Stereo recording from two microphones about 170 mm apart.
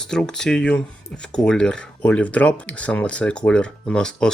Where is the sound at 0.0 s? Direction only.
5° left (ahead or behind).